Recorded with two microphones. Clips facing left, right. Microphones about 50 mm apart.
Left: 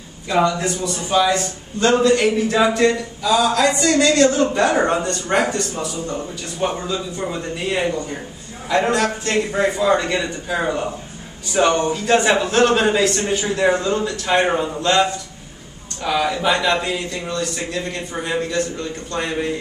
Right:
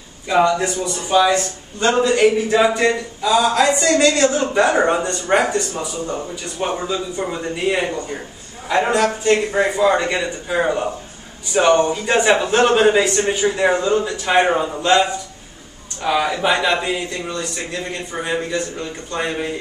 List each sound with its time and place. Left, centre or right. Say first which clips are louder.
0.3 s speech: right 2 dB; centre